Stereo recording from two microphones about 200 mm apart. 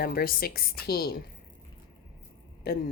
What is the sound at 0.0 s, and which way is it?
Speech, 50° left (ahead or behind).